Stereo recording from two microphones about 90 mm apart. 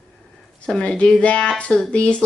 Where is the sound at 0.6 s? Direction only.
10° left (ahead or behind).